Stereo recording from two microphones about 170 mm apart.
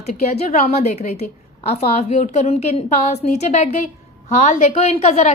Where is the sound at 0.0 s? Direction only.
40° left (ahead or behind).